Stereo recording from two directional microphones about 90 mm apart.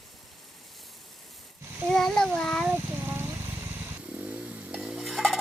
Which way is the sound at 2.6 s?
20° right (ahead or behind).